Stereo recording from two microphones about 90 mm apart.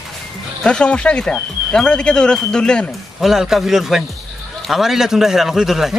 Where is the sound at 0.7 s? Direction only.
10° left (ahead or behind).